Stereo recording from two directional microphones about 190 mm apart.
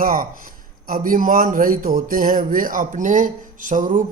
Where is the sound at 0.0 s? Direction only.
50° right (ahead or behind).